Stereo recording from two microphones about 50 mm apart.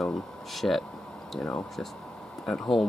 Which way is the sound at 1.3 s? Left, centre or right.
Centre.